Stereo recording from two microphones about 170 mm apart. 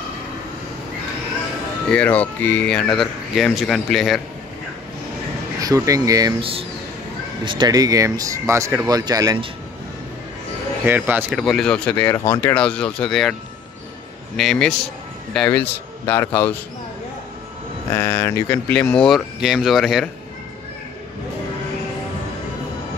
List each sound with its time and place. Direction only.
1.9 s speech: 10° left (ahead or behind)
5.6 s speech: 20° right (ahead or behind)
7.4 s speech: 25° right (ahead or behind)
10.9 s speech: 10° right (ahead or behind)
11.3 s speech: 5° left (ahead or behind)
17.9 s speech: 15° left (ahead or behind)